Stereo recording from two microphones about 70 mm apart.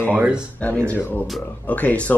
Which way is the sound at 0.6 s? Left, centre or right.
Centre.